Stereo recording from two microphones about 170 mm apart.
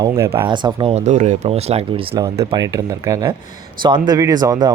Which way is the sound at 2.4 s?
25° right (ahead or behind).